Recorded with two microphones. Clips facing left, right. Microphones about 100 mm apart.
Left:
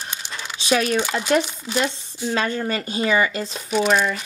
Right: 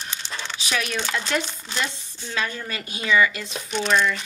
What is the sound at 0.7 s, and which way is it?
Speech, 35° left (ahead or behind).